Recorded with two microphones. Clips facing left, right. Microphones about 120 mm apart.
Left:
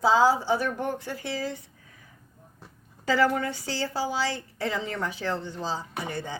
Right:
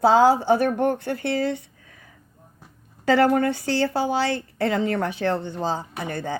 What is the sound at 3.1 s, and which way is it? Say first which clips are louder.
A woman's voice: right 6 dB; 60° right (ahead or behind).